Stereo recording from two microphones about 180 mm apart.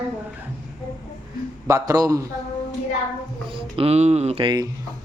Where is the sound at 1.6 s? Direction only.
20° right (ahead or behind).